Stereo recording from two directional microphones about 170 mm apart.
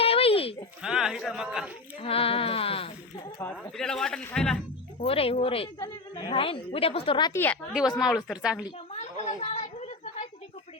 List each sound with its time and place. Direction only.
0.0 s sheep: 35° left (ahead or behind)
0.8 s speech: 5° right (ahead or behind)
2.0 s a woman's voice: 35° left (ahead or behind)
3.4 s speech: 5° left (ahead or behind)
4.9 s a woman's voice: 35° left (ahead or behind)
7.3 s a woman's voice: 10° left (ahead or behind)
7.9 s speech: centre (ahead or behind)
9.4 s a sound: 40° left (ahead or behind)